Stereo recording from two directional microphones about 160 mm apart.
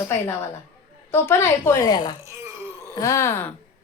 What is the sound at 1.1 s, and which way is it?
A woman's voice, 15° left (ahead or behind).